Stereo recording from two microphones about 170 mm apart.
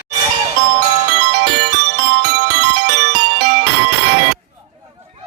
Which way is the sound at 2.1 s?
75° right (ahead or behind).